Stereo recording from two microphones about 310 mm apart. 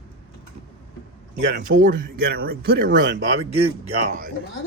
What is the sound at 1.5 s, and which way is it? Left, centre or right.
Speech, right.